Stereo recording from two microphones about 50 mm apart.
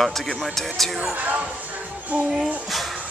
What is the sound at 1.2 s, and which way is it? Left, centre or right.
Speech, right.